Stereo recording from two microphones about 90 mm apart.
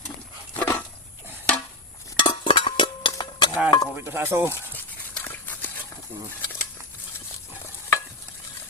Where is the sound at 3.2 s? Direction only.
60° left (ahead or behind).